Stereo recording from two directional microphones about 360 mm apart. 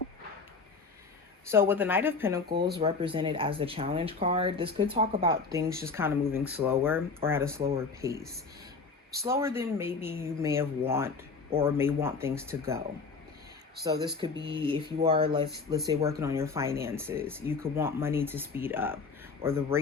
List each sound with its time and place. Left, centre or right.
1.5 s speech: centre
2.5 s speech: right
2.8 s speech: centre
13.8 s speech: centre
15.4 s speech: right
15.9 s speech: centre